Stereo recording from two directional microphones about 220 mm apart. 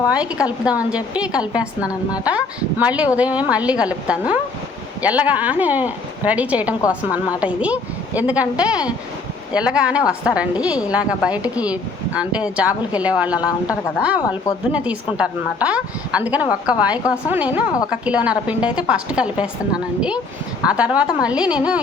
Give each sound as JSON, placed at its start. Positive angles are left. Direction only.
{"t": 0.1, "sound": "a woman's voice", "side_deg": -5}